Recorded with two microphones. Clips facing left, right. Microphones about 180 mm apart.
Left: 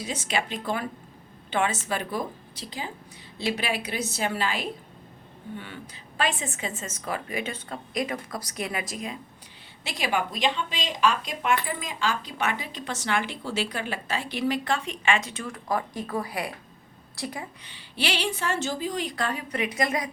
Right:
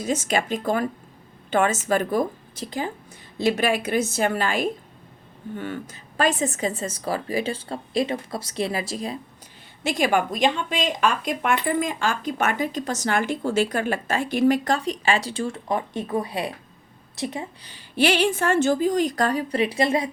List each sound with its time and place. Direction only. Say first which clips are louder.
0.0 s a woman's voice: right 6 dB; 45° right (ahead or behind); by 9.1 s 30° right (ahead or behind)
9.8 s a woman's voice: right 7 dB; 50° right (ahead or behind); by 17.5 s 25° right (ahead or behind)
17.6 s speech: right 13 dB; 40° right (ahead or behind)